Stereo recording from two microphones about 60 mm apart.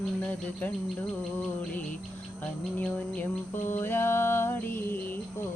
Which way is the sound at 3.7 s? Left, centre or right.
Left.